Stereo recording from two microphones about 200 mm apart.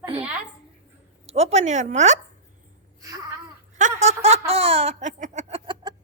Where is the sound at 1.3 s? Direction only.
35° right (ahead or behind).